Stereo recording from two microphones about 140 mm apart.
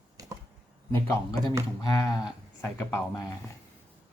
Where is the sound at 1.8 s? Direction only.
25° left (ahead or behind).